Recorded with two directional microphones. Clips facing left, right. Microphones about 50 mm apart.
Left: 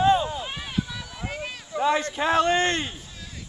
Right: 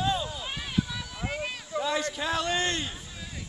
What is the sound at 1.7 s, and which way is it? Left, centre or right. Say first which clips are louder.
Speech: left 6 dB; left.